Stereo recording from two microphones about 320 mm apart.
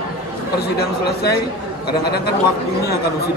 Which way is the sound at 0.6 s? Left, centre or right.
Left.